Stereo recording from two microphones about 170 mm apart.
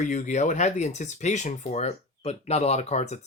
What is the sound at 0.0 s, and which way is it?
Speech, 45° left (ahead or behind).